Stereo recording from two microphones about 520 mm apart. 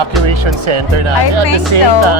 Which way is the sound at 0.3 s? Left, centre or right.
Right.